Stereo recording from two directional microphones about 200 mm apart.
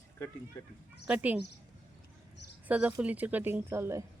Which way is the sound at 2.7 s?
5° right (ahead or behind).